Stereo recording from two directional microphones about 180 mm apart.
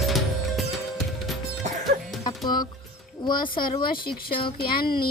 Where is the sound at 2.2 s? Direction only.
25° left (ahead or behind).